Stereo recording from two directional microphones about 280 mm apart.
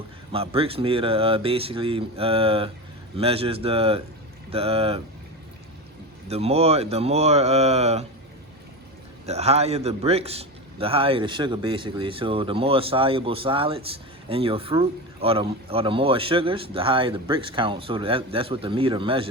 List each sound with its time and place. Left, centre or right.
0.3 s a man's voice: centre
6.2 s a man's voice: right
9.2 s a man's voice: right